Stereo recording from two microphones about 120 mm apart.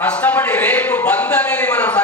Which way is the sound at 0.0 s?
10° left (ahead or behind).